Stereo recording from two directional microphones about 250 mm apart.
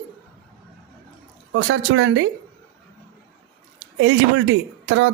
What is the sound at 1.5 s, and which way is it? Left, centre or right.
Speech, right.